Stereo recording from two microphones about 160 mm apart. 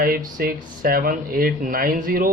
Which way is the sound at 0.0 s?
65° right (ahead or behind).